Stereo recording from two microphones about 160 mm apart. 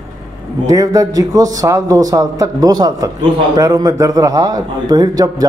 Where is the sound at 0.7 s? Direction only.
20° right (ahead or behind).